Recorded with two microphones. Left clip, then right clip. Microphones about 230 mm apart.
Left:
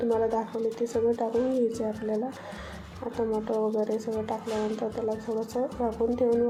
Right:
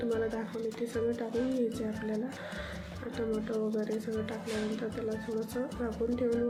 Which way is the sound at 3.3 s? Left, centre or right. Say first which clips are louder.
Left 5 dB; centre.